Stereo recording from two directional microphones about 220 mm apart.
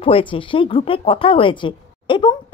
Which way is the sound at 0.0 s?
25° left (ahead or behind).